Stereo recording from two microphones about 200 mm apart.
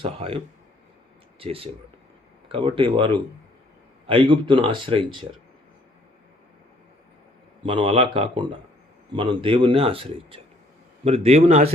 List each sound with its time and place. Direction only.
0.0 s speech: 30° right (ahead or behind)
7.6 s a man's voice: 25° right (ahead or behind)